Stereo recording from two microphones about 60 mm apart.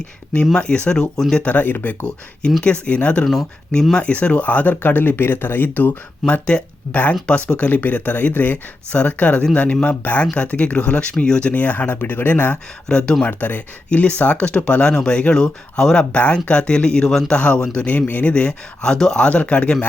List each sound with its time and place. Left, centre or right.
0.5 s speech: centre
1.4 s speech: left
6.2 s speech: centre
12.9 s speech: centre
13.2 s speech: left